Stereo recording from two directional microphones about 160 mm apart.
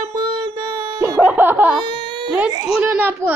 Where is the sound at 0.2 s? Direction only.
25° right (ahead or behind).